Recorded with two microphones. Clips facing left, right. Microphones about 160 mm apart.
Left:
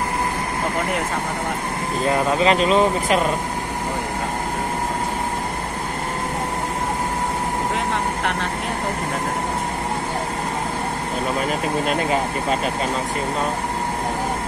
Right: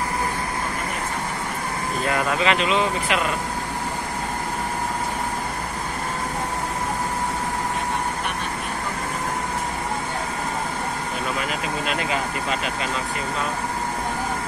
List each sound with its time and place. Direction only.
2.0 s speech: 25° left (ahead or behind)
8.2 s vehicle: 90° left
11.8 s speech: 40° left (ahead or behind)